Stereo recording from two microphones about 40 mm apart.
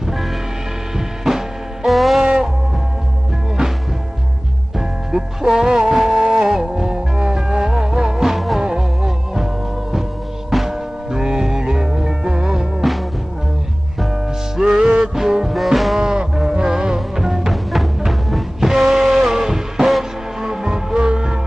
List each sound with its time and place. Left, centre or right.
0.9 s music: centre
4.7 s music: centre
10.5 s music: centre
14.7 s music: centre
15.5 s music: centre
16.0 s music: centre